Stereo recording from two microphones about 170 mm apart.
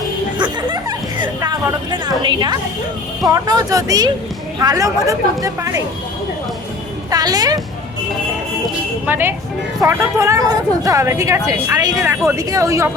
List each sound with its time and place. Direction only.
0.3 s music: 25° right (ahead or behind)
3.2 s speech: 20° right (ahead or behind)
7.1 s speech: 20° right (ahead or behind)
9.0 s a woman's voice: 10° right (ahead or behind)